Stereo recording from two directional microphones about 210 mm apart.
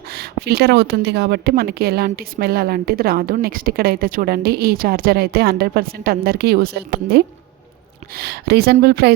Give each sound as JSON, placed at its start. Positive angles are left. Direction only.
{"t": 0.1, "sound": "speech", "side_deg": -50}